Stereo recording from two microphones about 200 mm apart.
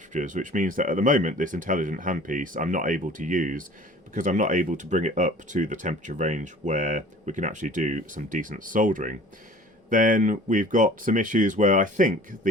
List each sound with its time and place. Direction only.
0.1 s speech: 40° right (ahead or behind)